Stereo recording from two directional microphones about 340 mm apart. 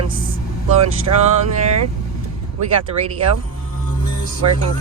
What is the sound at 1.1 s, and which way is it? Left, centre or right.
Music, right.